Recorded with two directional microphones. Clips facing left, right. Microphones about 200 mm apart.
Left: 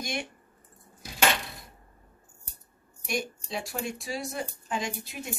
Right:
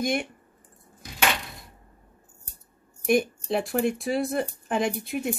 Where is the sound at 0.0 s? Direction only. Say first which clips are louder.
Right 8 dB; 55° right (ahead or behind).